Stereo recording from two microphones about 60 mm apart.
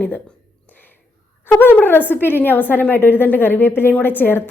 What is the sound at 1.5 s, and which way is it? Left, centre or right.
A woman's voice, left.